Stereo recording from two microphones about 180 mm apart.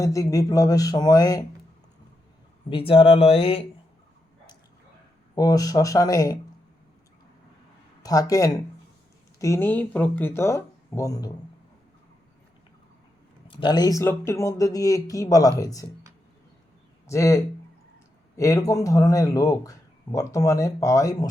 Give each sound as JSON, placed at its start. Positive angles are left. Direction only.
{"t": 0.0, "sound": "a man's voice", "side_deg": 20}
{"t": 2.6, "sound": "speech", "side_deg": 30}
{"t": 5.3, "sound": "a man's voice", "side_deg": 20}
{"t": 8.0, "sound": "a man's voice", "side_deg": 20}
{"t": 13.5, "sound": "a man's voice", "side_deg": 25}
{"t": 17.1, "sound": "a man's voice", "side_deg": 15}